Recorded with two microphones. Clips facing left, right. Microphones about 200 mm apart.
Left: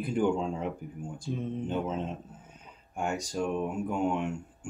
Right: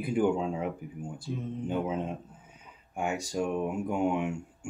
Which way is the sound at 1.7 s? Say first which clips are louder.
Right 4 dB; 15° right (ahead or behind).